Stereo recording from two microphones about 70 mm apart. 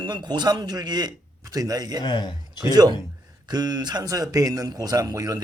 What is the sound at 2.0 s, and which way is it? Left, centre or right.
Speech, left.